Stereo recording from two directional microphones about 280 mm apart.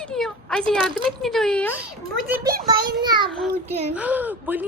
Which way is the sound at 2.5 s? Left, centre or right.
Right.